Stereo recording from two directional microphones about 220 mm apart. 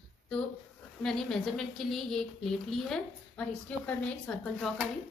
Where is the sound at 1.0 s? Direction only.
Centre (ahead or behind).